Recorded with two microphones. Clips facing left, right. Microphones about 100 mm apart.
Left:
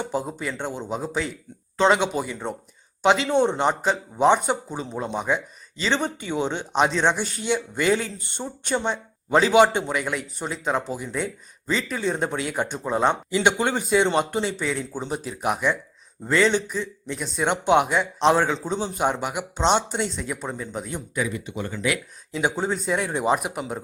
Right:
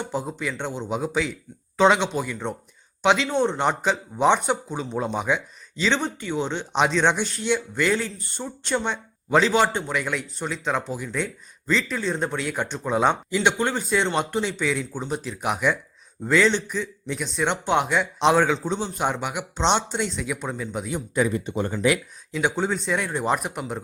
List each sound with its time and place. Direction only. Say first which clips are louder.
0.0 s speech: left 1 dB; centre (ahead or behind)
3.3 s speech: left 2 dB; 15° left (ahead or behind)
3.6 s speech: left 1 dB; 5° left (ahead or behind)
13.5 s speech: left 3 dB; 15° left (ahead or behind); by 21.0 s centre (ahead or behind)
21.2 s speech: right 5 dB; 35° right (ahead or behind)
22.3 s speech: even; 5° left (ahead or behind)